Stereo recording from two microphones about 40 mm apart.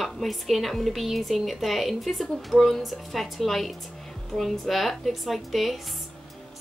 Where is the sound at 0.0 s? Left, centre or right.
Centre.